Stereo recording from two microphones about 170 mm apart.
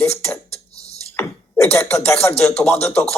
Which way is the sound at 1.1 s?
15° left (ahead or behind).